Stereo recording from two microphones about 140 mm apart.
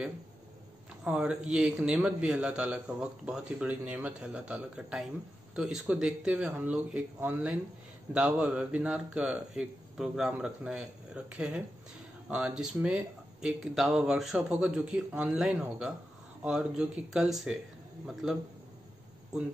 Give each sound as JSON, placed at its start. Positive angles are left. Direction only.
{"t": 1.0, "sound": "a man's voice", "side_deg": -5}